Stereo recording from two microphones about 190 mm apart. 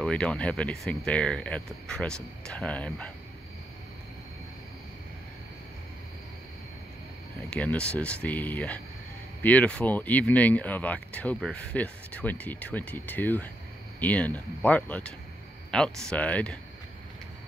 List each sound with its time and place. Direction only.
0.0 s speech: 5° left (ahead or behind)
7.4 s speech: 5° left (ahead or behind)